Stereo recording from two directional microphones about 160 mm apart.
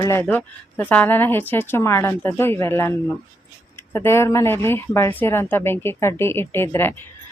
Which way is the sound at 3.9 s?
15° left (ahead or behind).